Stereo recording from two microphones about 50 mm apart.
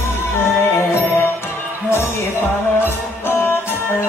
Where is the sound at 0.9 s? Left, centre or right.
Left.